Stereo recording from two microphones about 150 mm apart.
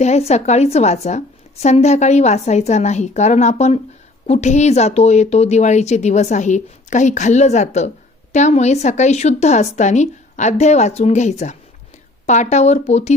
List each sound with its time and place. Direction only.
0.0 s speech: 45° left (ahead or behind)